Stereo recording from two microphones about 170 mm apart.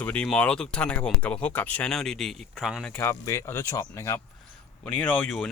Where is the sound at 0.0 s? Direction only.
5° left (ahead or behind).